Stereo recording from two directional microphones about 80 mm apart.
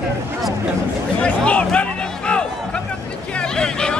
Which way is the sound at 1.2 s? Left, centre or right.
Centre.